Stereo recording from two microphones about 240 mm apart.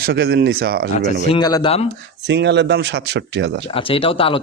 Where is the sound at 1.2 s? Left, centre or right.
Centre.